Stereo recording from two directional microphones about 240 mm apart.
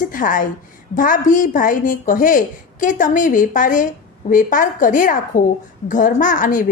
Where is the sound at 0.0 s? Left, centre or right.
Left.